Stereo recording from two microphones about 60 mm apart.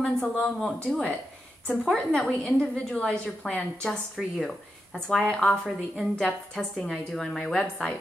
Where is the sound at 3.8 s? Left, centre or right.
Centre.